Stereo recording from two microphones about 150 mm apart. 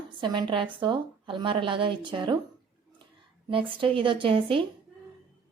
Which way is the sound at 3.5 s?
35° right (ahead or behind).